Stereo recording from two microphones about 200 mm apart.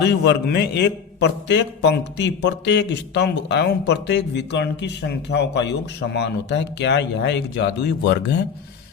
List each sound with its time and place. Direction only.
0.0 s a man's voice: 55° left (ahead or behind)